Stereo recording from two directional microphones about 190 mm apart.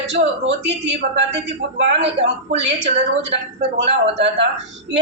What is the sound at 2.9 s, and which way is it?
A woman's voice, 65° right (ahead or behind).